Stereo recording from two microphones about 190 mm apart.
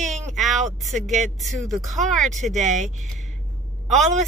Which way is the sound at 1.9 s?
40° right (ahead or behind).